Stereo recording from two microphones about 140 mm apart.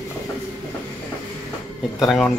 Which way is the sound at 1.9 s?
5° left (ahead or behind).